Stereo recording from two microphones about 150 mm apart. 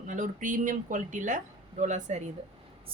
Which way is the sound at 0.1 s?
60° right (ahead or behind).